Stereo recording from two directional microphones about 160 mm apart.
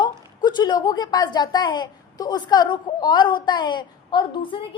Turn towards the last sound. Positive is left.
turn(degrees=30)  # may be behind; listen again after turning